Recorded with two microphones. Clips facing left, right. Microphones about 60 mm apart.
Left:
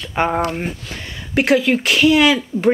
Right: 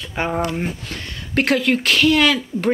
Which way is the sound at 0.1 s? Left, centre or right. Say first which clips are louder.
Left 5 dB; left.